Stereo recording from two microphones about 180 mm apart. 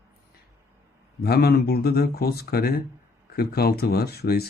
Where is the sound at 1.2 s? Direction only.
60° left (ahead or behind).